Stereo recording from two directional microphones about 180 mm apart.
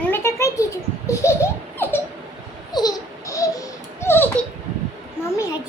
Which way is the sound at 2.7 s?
20° left (ahead or behind).